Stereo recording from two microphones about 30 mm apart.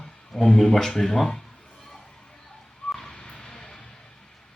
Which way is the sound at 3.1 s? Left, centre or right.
Left.